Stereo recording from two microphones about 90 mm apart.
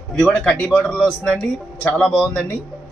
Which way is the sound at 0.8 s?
10° left (ahead or behind).